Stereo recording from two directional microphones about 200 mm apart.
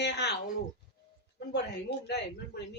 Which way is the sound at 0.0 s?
60° left (ahead or behind).